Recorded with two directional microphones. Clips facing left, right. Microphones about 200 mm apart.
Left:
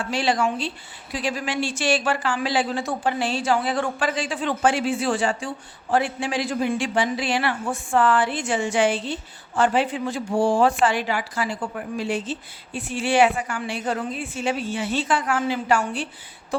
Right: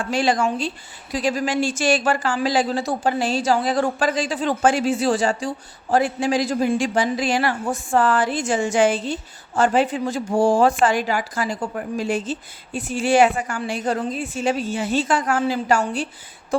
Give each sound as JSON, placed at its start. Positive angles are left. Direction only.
{"t": 0.1, "sound": "speech", "side_deg": -45}